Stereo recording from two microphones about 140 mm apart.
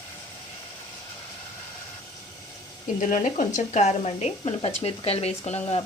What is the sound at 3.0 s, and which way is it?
A woman's voice, 65° left (ahead or behind).